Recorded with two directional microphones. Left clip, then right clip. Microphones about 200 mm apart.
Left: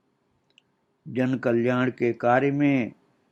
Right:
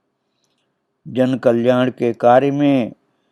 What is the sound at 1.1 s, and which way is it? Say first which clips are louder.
Speech: right 9 dB; 30° right (ahead or behind).